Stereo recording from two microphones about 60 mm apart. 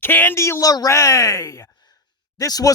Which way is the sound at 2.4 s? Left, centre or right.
Left.